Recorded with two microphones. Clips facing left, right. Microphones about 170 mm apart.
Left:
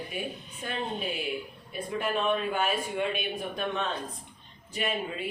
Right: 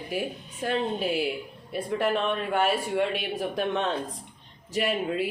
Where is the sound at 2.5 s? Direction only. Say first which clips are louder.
Right 4 dB; 75° right (ahead or behind).